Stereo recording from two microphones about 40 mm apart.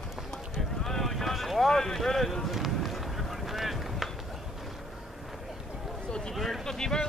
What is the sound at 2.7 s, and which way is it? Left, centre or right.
Run, centre.